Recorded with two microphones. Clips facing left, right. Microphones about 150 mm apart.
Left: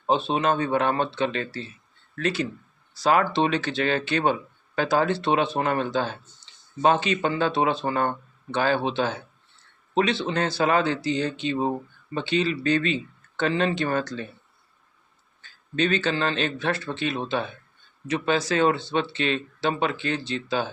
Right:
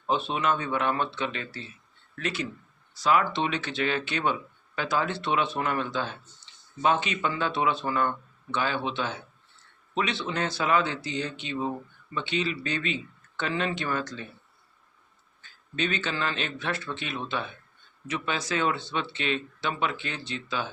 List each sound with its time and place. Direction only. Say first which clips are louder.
0.1 s speech: left 4 dB; 30° left (ahead or behind)
15.7 s speech: left 6 dB; 35° left (ahead or behind)